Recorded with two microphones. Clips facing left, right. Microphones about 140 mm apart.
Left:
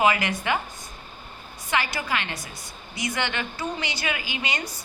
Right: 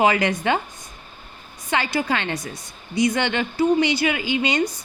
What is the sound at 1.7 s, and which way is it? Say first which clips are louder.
Speech: right 4 dB; 25° right (ahead or behind).